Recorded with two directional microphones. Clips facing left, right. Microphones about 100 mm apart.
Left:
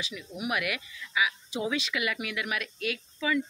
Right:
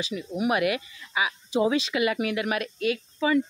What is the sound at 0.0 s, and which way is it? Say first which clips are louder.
Speech: right 8 dB; 35° right (ahead or behind).